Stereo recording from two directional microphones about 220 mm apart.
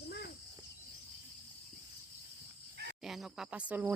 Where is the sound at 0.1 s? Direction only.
45° left (ahead or behind).